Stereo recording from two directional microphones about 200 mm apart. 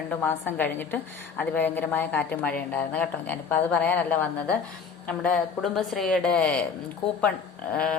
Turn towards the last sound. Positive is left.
turn(degrees=5)  # may be behind; listen again after turning